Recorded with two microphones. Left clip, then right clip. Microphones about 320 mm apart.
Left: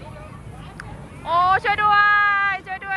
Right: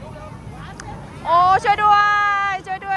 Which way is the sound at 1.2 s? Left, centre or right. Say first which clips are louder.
Right 3 dB; centre.